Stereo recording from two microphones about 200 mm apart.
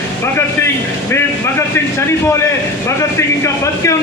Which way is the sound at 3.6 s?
15° left (ahead or behind).